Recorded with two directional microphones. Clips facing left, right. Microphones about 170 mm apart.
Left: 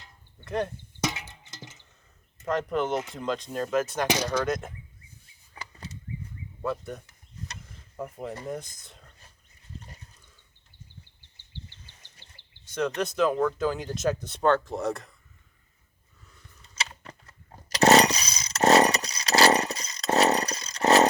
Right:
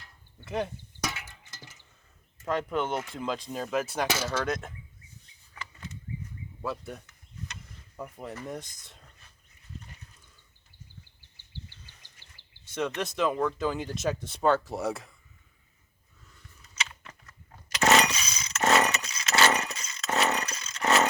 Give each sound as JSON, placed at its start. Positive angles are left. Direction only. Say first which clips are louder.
{"t": 0.4, "sound": "speech", "louder": "left 2 dB", "side_deg": -5}
{"t": 1.0, "sound": "a sound", "louder": "left 5 dB", "side_deg": 20}
{"t": 2.5, "sound": "speech", "louder": "left 2 dB", "side_deg": 0}
{"t": 6.6, "sound": "speech", "louder": "left 4 dB", "side_deg": 0}
{"t": 7.1, "sound": "a sound", "louder": "left 1 dB", "side_deg": 35}
{"t": 7.9, "sound": "speech", "louder": "left 4 dB", "side_deg": 5}
{"t": 12.6, "sound": "a sound", "louder": "left 3 dB", "side_deg": 0}
{"t": 13.0, "sound": "speech", "louder": "left 3 dB", "side_deg": 0}
{"t": 16.7, "sound": "chainsaw", "louder": "left 2 dB", "side_deg": 35}